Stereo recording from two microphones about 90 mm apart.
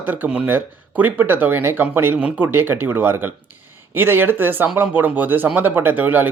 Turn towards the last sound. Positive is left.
turn(degrees=-20)  # may be behind; listen again after turning